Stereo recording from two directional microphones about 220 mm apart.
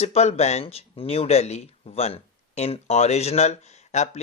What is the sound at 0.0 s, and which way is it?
Speech, 30° left (ahead or behind).